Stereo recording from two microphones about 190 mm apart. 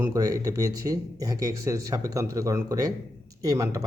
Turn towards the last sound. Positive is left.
turn(degrees=-20)  # may be behind; listen again after turning